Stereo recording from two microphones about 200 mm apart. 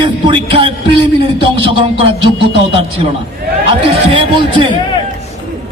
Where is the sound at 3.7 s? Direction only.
25° right (ahead or behind).